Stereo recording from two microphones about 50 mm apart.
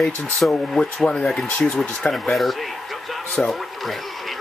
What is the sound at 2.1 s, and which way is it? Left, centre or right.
Speech, centre.